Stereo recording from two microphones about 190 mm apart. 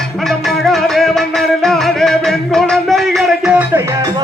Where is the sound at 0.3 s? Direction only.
Centre (ahead or behind).